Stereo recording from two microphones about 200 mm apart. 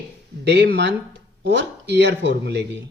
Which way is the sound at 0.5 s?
60° right (ahead or behind).